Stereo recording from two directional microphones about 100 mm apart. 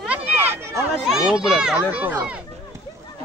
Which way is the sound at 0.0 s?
15° right (ahead or behind).